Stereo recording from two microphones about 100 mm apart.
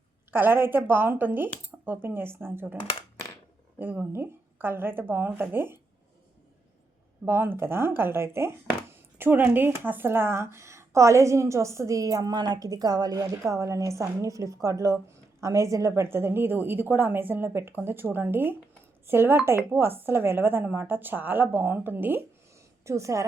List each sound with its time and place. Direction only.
0.3 s speech: 20° right (ahead or behind)
3.8 s speech: 20° right (ahead or behind)
7.3 s speech: 20° right (ahead or behind)
22.9 s a woman's voice: 30° right (ahead or behind)